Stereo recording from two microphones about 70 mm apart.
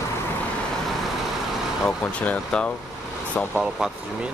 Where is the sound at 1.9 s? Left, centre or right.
Centre.